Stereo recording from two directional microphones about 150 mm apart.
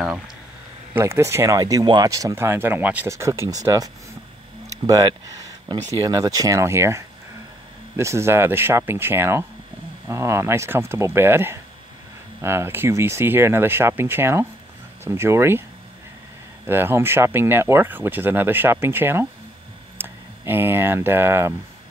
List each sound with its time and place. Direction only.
0.9 s speech: 15° right (ahead or behind)
16.6 s speech: 15° right (ahead or behind)